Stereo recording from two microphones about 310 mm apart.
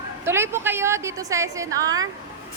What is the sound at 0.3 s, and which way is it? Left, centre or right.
A woman's voice, centre.